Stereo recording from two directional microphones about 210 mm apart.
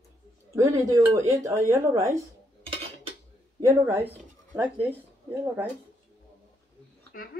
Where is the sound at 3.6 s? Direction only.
15° right (ahead or behind).